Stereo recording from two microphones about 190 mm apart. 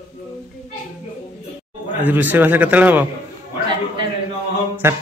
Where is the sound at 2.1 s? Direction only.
10° right (ahead or behind).